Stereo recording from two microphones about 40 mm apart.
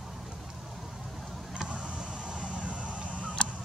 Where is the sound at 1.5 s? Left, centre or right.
Right.